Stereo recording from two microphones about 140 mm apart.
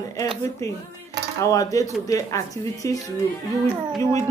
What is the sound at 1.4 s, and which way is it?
Speech, 25° left (ahead or behind).